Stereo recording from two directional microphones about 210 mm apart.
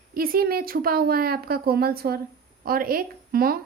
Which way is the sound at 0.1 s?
45° right (ahead or behind).